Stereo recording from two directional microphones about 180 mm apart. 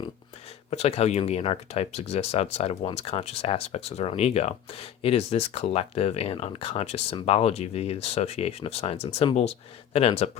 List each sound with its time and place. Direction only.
0.7 s speech: 35° left (ahead or behind)